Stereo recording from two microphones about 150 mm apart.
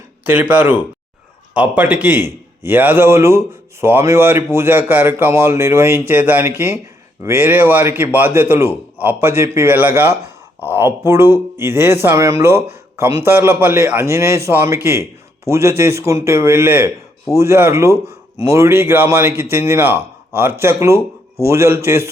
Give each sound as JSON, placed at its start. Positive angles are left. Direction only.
{"t": 0.3, "sound": "a man's voice", "side_deg": -10}